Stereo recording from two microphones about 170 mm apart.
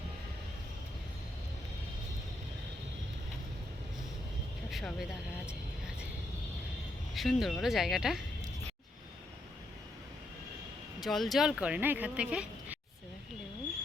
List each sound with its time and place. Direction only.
4.7 s vehicle: centre (ahead or behind)
7.1 s speech: centre (ahead or behind)
11.0 s speech: centre (ahead or behind)